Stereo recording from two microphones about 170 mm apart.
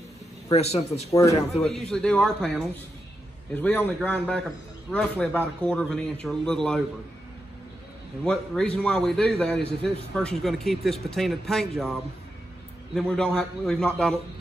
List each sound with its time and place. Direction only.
0.5 s speech: 40° left (ahead or behind)
1.5 s a man's voice: centre (ahead or behind)
8.2 s a man's voice: 5° left (ahead or behind)